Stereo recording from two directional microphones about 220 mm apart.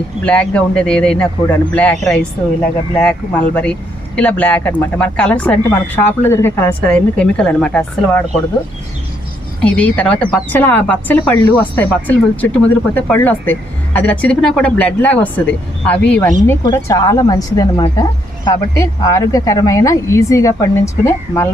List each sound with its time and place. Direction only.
0.3 s a woman's voice: 5° left (ahead or behind)
9.6 s a woman's voice: 5° left (ahead or behind)